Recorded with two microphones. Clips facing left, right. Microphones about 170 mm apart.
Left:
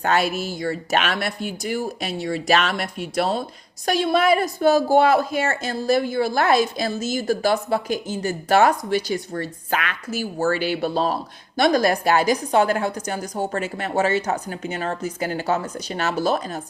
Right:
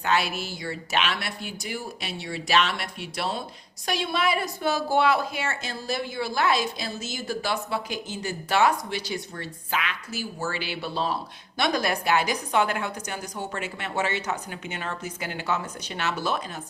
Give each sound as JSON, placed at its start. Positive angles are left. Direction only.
{"t": 0.0, "sound": "a woman's voice", "side_deg": 45}